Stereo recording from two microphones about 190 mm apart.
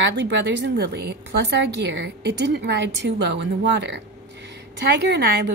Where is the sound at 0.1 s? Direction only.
70° right (ahead or behind).